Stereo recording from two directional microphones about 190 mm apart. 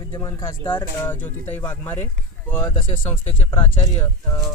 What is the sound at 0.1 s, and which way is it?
Speech, 20° left (ahead or behind).